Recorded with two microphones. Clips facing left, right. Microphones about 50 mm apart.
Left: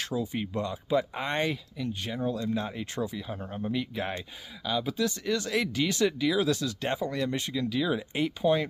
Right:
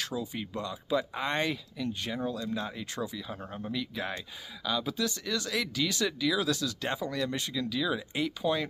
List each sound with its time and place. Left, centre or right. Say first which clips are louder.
0.2 s speech: left 4 dB; left
4.6 s speech: left 2 dB; centre